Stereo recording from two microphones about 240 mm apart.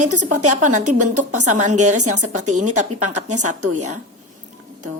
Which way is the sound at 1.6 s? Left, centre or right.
Right.